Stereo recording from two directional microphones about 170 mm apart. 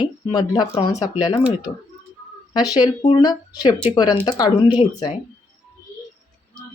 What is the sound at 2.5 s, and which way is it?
Speech, 25° left (ahead or behind).